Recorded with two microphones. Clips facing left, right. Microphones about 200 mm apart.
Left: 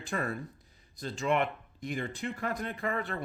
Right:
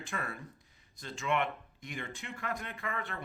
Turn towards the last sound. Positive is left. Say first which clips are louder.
# left 6 dB
turn(degrees=35)  # may be behind; listen again after turning